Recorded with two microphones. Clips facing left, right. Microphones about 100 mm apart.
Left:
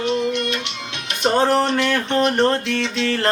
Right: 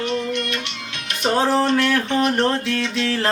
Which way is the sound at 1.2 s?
5° right (ahead or behind).